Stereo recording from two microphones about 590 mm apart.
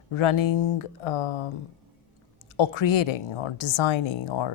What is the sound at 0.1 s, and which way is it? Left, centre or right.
Speech, left.